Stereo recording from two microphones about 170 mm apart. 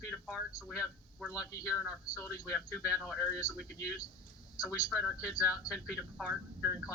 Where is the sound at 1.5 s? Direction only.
20° left (ahead or behind).